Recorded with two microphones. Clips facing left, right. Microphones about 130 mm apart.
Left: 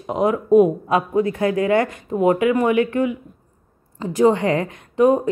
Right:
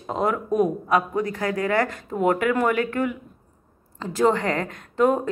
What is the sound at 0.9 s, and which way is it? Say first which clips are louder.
A woman's voice: left 4 dB; 25° left (ahead or behind).